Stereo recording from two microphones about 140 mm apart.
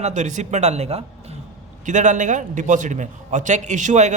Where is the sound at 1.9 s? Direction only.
65° right (ahead or behind).